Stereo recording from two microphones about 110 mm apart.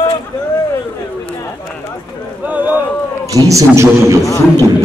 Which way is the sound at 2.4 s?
15° right (ahead or behind).